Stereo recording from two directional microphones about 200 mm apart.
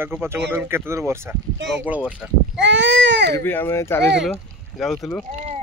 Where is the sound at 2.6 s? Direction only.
65° right (ahead or behind).